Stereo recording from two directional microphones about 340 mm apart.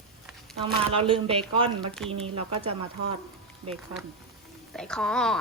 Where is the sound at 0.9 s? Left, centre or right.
Centre.